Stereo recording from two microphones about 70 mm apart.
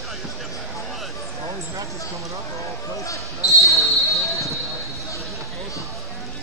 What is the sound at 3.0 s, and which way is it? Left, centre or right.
Speech, left.